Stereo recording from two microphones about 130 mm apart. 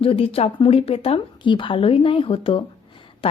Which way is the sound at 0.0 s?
45° left (ahead or behind).